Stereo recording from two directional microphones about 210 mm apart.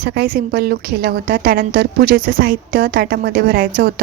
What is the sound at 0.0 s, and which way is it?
A woman's voice, 50° right (ahead or behind).